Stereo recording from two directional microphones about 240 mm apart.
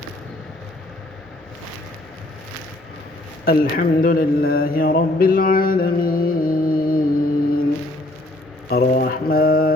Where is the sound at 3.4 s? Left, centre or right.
Left.